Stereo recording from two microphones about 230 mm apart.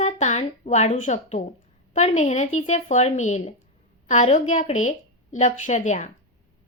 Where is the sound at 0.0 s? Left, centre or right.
Left.